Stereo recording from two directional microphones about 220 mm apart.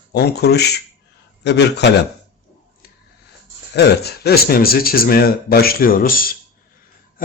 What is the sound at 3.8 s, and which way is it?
Speech, 45° left (ahead or behind).